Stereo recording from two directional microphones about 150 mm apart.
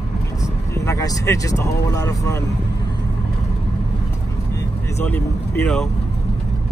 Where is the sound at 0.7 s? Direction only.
20° left (ahead or behind).